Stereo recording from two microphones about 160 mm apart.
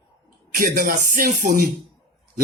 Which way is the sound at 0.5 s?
65° right (ahead or behind).